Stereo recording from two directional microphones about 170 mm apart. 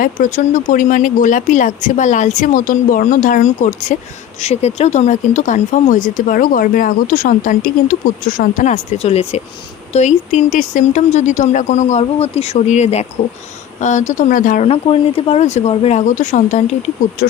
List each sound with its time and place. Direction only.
0.0 s speech: 50° left (ahead or behind)
14.7 s speech: 35° left (ahead or behind)